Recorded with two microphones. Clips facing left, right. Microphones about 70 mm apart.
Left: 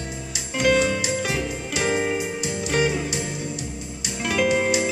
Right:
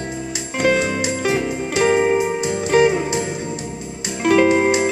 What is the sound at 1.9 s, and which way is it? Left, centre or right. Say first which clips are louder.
Music: right 7 dB; right.